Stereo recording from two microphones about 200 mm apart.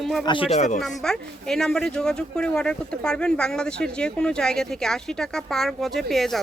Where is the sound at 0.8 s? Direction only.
Centre (ahead or behind).